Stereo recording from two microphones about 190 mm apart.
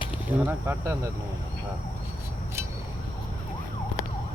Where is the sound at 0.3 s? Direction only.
10° right (ahead or behind).